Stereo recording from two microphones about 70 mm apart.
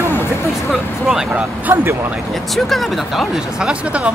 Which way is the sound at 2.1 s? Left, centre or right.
Centre.